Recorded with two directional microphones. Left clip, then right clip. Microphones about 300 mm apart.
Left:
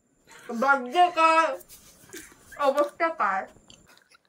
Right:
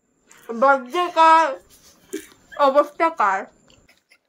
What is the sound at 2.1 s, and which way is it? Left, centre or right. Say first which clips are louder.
Speech: right 10 dB; centre.